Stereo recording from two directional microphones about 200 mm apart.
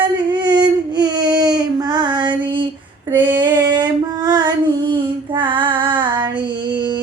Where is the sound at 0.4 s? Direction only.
20° right (ahead or behind).